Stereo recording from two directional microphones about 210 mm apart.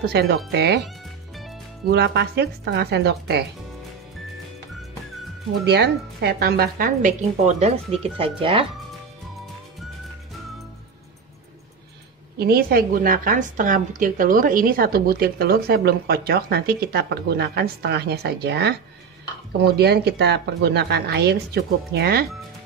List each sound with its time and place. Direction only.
0.0 s a woman's voice: 50° right (ahead or behind)
0.8 s music: centre (ahead or behind)
1.9 s a woman's voice: 50° right (ahead or behind)
5.7 s a woman's voice: 50° right (ahead or behind); by 8.6 s 25° right (ahead or behind)
12.4 s a woman's voice: 45° right (ahead or behind)
19.8 s a woman's voice: 50° right (ahead or behind)